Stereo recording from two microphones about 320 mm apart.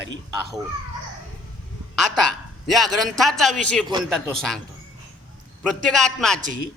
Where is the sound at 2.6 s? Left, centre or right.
Centre.